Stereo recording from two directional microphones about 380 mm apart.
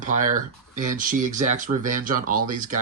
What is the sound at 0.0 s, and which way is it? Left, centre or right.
Speech, centre.